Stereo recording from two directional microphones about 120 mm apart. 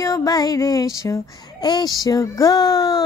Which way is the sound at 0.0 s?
30° left (ahead or behind).